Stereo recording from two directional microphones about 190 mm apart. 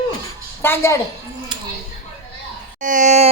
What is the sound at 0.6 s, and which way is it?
Speech, 15° left (ahead or behind).